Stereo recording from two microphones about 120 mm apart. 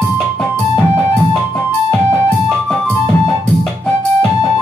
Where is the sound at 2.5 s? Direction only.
5° left (ahead or behind).